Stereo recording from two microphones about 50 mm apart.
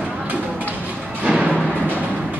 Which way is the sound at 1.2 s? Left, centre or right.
Centre.